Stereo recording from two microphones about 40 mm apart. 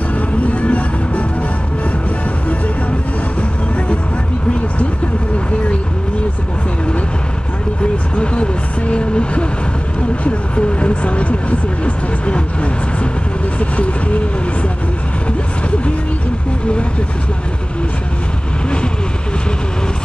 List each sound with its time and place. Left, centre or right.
0.5 s music: left
7.8 s vehicle: left
13.6 s vehicle: left